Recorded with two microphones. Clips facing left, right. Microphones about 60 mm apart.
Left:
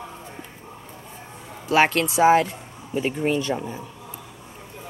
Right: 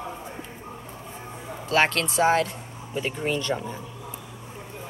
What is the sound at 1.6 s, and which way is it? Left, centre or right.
Speech, centre.